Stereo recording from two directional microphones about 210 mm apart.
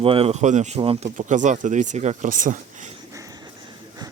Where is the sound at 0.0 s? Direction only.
25° right (ahead or behind).